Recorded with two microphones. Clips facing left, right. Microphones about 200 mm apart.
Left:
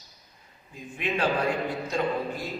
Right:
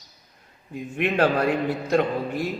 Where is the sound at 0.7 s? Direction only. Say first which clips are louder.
Right 6 dB; 65° right (ahead or behind).